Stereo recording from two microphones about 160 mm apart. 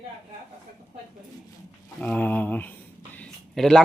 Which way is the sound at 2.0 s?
10° left (ahead or behind).